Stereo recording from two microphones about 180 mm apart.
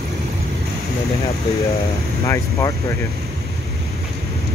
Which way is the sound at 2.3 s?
15° left (ahead or behind).